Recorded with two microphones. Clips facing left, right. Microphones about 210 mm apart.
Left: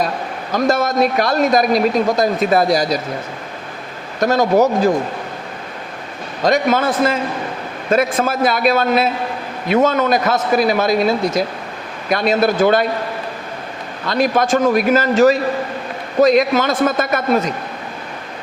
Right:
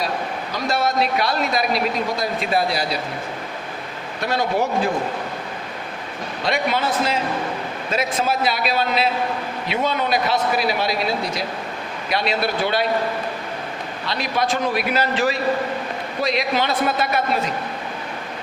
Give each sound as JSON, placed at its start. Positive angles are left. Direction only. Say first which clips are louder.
{"t": 0.5, "sound": "speech", "louder": "left 6 dB", "side_deg": 45}
{"t": 4.2, "sound": "speech", "louder": "left 8 dB", "side_deg": 45}
{"t": 6.4, "sound": "speech", "louder": "left 7 dB", "side_deg": 45}
{"t": 14.0, "sound": "speech", "louder": "left 8 dB", "side_deg": 50}